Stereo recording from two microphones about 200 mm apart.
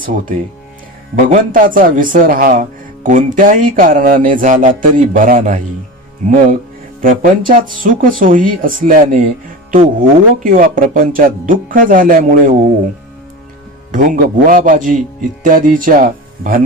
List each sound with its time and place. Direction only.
0.0 s a man's voice: 45° right (ahead or behind)
13.9 s a man's voice: 40° right (ahead or behind)